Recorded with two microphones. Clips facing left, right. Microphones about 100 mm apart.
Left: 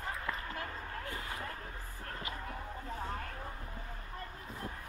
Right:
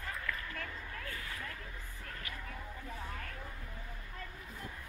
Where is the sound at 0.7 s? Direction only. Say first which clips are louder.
Left 3 dB; 35° left (ahead or behind).